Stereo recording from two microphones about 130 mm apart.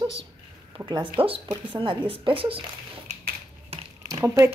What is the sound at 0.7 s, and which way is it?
A woman's voice, 35° right (ahead or behind).